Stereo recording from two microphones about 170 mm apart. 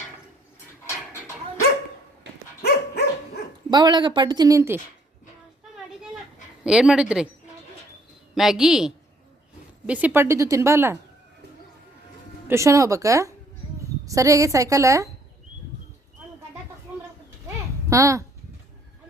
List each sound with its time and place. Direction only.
2.3 s dog: 90° right
2.6 s dog: 70° left (ahead or behind)
3.7 s a woman's voice: 25° right (ahead or behind)
6.7 s a woman's voice: 5° right (ahead or behind)
8.4 s a woman's voice: 5° right (ahead or behind)
12.5 s a woman's voice: 15° right (ahead or behind)
17.8 s a child's voice: 20° right (ahead or behind)